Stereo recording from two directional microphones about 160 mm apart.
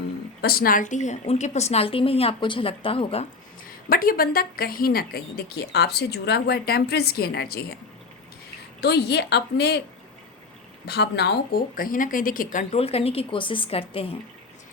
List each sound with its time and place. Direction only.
0.4 s speech: 65° left (ahead or behind); by 3.2 s 35° left (ahead or behind)
3.8 s a woman's voice: 65° left (ahead or behind)
8.8 s a woman's voice: 90° left
10.8 s speech: 90° left; by 12.6 s 60° left (ahead or behind)
12.7 s speech: 40° left (ahead or behind)